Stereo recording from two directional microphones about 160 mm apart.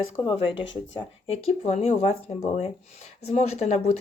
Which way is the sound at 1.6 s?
45° left (ahead or behind).